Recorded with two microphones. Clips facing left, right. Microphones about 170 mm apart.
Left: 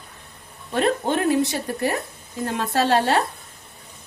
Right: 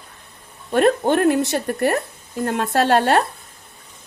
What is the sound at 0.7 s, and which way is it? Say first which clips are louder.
Speech: right 5 dB; 55° right (ahead or behind).